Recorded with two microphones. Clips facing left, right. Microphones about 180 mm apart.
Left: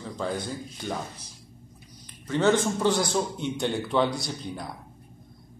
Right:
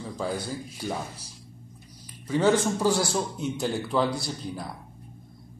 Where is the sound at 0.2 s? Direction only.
5° right (ahead or behind).